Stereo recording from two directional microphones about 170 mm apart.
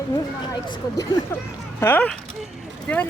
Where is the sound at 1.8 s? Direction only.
10° left (ahead or behind).